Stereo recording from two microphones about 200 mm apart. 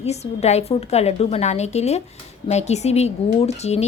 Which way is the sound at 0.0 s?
30° left (ahead or behind).